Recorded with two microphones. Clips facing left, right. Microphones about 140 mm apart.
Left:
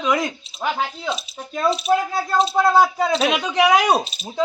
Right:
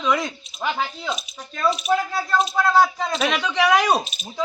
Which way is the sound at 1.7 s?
30° left (ahead or behind).